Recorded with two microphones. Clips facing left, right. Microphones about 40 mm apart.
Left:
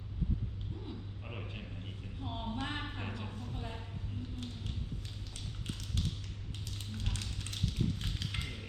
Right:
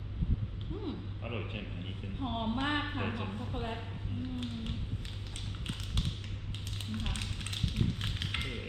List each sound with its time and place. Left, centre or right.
0.9 s speech: right
1.2 s a woman's voice: right
5.6 s tap: right